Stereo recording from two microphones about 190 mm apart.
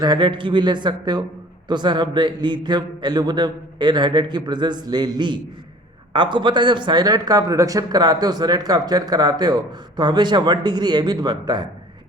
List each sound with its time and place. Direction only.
0.0 s speech: 25° right (ahead or behind)